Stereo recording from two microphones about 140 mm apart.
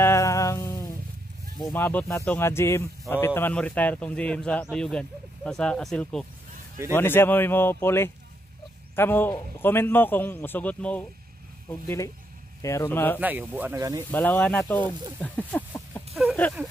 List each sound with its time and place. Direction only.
0.0 s music: 20° left (ahead or behind)
1.7 s speech: 15° left (ahead or behind)
6.9 s speech: 15° left (ahead or behind)
12.6 s speech: 20° left (ahead or behind)
13.2 s speech: 10° right (ahead or behind)
13.7 s speech: 25° right (ahead or behind)
14.1 s speech: 15° left (ahead or behind)
15.1 s a sound: 10° left (ahead or behind)
16.4 s speech: 10° left (ahead or behind)